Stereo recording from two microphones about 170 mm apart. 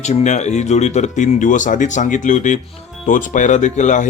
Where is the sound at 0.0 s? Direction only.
40° left (ahead or behind).